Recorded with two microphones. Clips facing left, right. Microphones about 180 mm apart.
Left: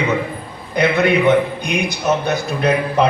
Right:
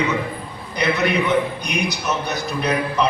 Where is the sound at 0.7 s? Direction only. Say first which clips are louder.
Left 5 dB; 55° left (ahead or behind).